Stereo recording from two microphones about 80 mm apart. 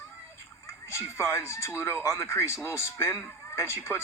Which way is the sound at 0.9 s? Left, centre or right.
Left.